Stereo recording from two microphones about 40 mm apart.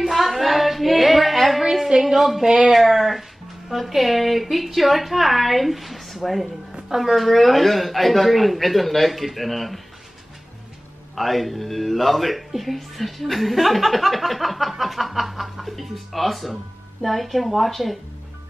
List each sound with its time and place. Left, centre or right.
0.1 s hands: centre
2.1 s speech: centre
2.4 s speech: centre
2.7 s speech: centre
11.1 s speech: centre